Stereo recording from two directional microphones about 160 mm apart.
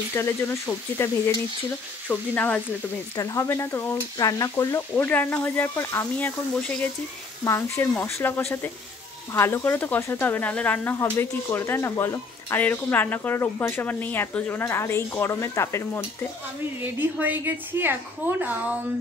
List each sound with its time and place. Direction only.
0.1 s speech: 15° left (ahead or behind)
16.8 s a woman's voice: 10° right (ahead or behind)